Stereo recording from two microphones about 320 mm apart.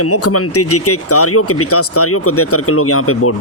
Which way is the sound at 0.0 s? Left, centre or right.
Left.